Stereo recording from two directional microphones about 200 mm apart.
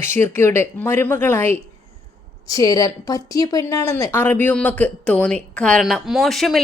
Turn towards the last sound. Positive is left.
turn(degrees=0)  # may be behind; listen again after turning